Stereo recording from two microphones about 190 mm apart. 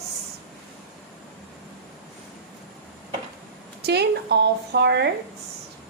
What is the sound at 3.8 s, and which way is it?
Speech, 60° right (ahead or behind).